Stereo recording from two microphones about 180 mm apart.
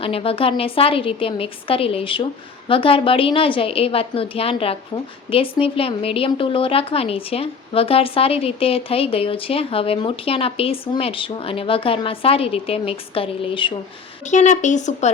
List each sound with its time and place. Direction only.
0.0 s a woman's voice: 30° left (ahead or behind)
14.3 s a woman's voice: 40° left (ahead or behind)